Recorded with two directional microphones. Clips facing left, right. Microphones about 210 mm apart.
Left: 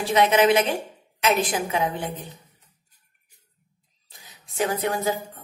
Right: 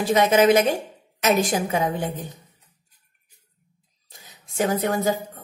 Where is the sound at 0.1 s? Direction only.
45° right (ahead or behind).